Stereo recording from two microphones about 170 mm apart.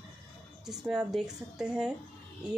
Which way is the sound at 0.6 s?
5° right (ahead or behind).